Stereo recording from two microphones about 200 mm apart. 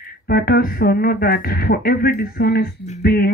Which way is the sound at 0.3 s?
50° left (ahead or behind).